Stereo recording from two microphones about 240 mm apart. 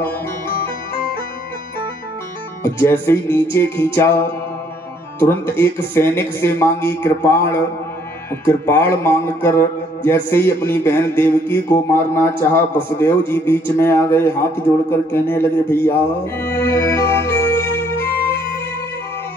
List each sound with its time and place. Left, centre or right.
2.6 s a sound: centre
15.7 s music: centre
17.9 s music: left